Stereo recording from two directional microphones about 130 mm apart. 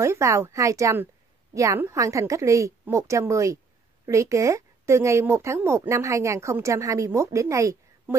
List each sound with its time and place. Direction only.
0.0 s a woman's voice: 20° right (ahead or behind)